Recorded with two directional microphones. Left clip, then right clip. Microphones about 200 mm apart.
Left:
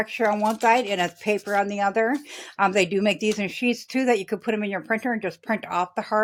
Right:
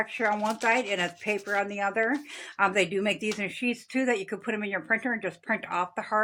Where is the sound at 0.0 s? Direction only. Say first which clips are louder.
Left 5 dB; 50° left (ahead or behind).